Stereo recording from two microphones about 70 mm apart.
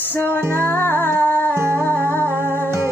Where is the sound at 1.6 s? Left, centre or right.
Right.